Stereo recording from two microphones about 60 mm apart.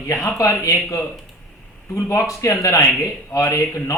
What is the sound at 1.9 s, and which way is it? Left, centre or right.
Speech, left.